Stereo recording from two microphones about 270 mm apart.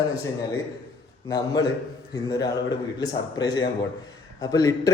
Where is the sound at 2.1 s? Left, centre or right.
Centre.